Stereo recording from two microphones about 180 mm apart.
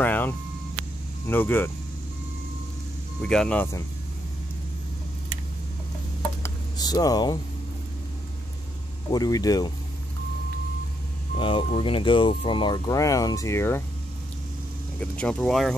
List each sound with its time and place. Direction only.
0.0 s vehicle: 10° left (ahead or behind)
1.2 s speech: 10° left (ahead or behind)
3.2 s speech: 5° left (ahead or behind)
6.4 s a sound: 20° left (ahead or behind)
9.1 s speech: 20° left (ahead or behind)
11.3 s speech: 30° left (ahead or behind); by 13.8 s 15° left (ahead or behind)
15.0 s speech: 5° left (ahead or behind)